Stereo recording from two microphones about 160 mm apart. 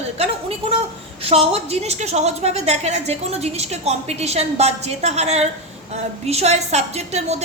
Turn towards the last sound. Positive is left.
turn(degrees=-45)  # may be behind; listen again after turning